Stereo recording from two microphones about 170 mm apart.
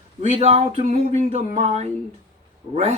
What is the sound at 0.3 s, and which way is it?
Speech, 40° right (ahead or behind).